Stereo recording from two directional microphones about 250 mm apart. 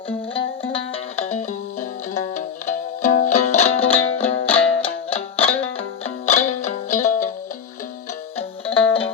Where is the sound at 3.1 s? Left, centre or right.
Left.